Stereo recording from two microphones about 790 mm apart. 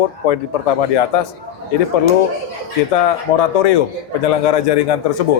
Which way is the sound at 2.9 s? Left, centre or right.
Left.